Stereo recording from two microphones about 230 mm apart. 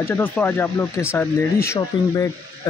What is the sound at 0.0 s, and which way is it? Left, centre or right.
Speech, centre.